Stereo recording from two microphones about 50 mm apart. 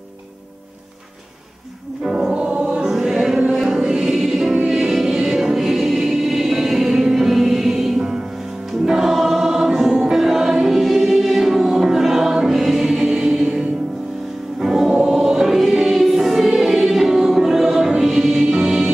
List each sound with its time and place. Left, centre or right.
2.0 s music: centre
2.3 s music: right
2.8 s music: centre
4.6 s choir: centre
8.8 s music: centre
14.6 s choir: centre